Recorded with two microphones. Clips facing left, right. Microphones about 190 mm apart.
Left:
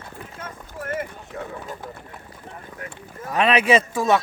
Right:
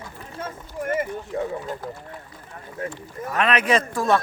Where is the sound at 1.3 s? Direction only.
25° right (ahead or behind).